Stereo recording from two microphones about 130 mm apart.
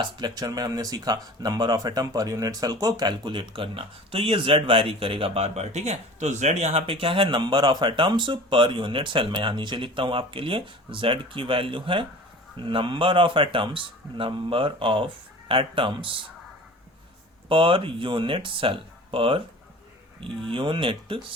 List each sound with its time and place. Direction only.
0.0 s speech: 30° right (ahead or behind)
17.5 s speech: 40° right (ahead or behind)
20.5 s speech: 40° right (ahead or behind)